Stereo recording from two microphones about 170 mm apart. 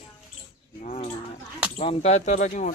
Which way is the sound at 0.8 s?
40° left (ahead or behind).